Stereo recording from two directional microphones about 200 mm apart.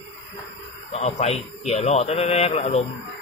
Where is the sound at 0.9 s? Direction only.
30° left (ahead or behind).